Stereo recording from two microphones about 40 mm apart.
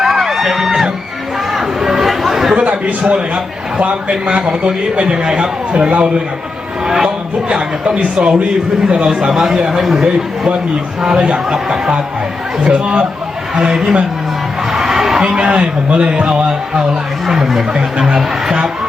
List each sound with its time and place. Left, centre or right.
0.0 s music: centre
1.5 s a sound: centre
2.0 s chatter: centre
2.6 s a man's voice: right
6.8 s a man's voice: centre; by 13.1 s right
13.6 s a man's voice: centre
14.7 s a sound: centre
15.2 s a man's voice: right
16.5 s a man's voice: centre